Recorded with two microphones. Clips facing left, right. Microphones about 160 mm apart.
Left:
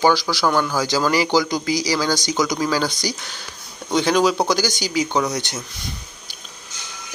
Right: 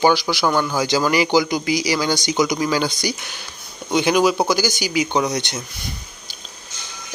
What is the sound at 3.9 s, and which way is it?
A man's voice, 10° right (ahead or behind).